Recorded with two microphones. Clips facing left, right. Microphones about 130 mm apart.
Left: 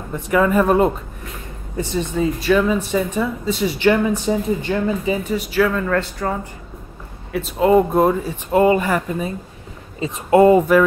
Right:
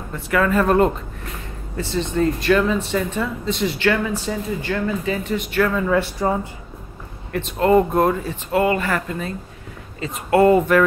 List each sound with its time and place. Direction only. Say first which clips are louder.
0.1 s speech: left 3 dB; 15° left (ahead or behind); by 6.3 s 15° right (ahead or behind)
7.3 s speech: left 1 dB; 5° left (ahead or behind)